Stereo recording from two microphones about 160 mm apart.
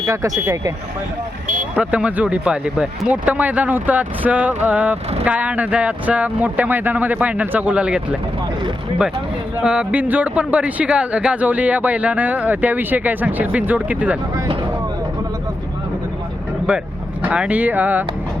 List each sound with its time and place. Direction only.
0.0 s speech: 20° right (ahead or behind)
1.7 s speech: 5° right (ahead or behind)
9.6 s speech: 5° right (ahead or behind)
14.3 s vehicle: 30° right (ahead or behind)
17.2 s speech: 10° right (ahead or behind)